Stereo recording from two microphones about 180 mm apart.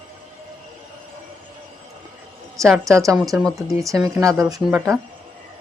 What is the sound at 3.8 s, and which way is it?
Speech, 20° right (ahead or behind).